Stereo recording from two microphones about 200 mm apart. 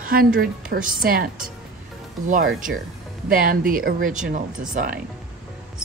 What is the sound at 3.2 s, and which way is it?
Speech, 45° right (ahead or behind).